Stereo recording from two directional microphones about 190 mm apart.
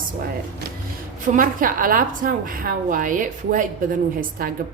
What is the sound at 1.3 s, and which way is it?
A woman's voice, 45° right (ahead or behind).